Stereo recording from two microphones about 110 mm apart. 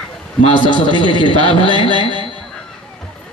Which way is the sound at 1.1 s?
45° right (ahead or behind).